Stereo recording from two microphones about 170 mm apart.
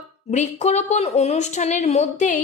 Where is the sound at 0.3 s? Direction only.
40° left (ahead or behind).